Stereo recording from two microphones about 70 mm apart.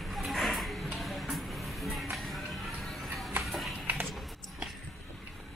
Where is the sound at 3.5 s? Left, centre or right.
Centre.